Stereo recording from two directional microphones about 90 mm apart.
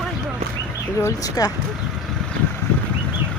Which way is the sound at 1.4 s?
45° left (ahead or behind).